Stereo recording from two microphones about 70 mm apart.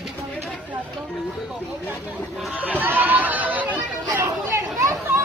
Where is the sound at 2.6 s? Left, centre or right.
Right.